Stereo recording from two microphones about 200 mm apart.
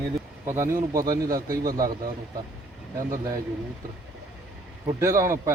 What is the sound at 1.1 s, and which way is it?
Speech, 45° right (ahead or behind).